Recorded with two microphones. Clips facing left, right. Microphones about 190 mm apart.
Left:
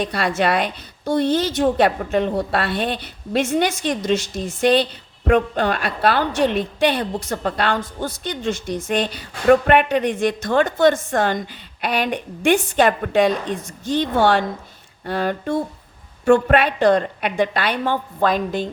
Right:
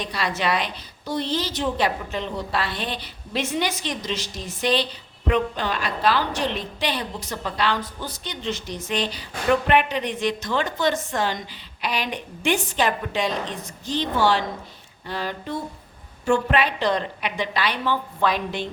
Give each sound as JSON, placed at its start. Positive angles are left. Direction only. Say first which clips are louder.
{"t": 0.0, "sound": "a woman's voice", "louder": "left 6 dB", "side_deg": 55}